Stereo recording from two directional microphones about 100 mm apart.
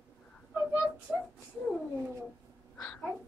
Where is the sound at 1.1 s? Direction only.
5° right (ahead or behind).